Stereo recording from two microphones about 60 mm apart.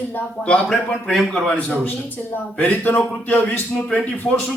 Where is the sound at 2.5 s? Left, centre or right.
Left.